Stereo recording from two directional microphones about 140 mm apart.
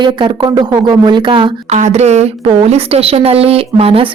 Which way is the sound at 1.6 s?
55° right (ahead or behind).